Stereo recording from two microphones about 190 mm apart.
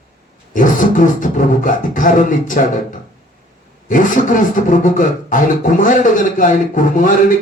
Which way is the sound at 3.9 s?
45° left (ahead or behind).